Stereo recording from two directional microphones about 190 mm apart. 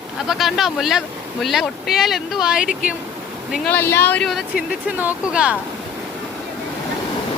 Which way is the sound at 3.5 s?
10° left (ahead or behind).